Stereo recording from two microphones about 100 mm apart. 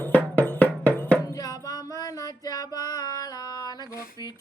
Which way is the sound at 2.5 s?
40° left (ahead or behind).